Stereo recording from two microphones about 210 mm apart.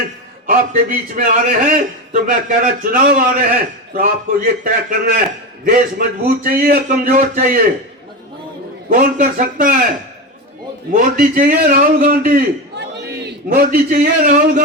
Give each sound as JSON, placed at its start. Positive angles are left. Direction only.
{"t": 0.4, "sound": "a man's voice", "side_deg": -40}
{"t": 8.9, "sound": "a man's voice", "side_deg": -40}
{"t": 10.9, "sound": "a man's voice", "side_deg": -40}